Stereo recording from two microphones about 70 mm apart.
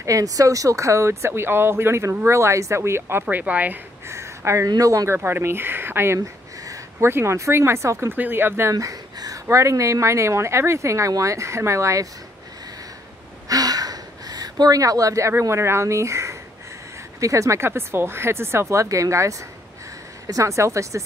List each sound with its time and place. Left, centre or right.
0.0 s speech: right
4.1 s speech: right
4.6 s speech: right
8.1 s speech: right
8.7 s speech: right
13.5 s speech: right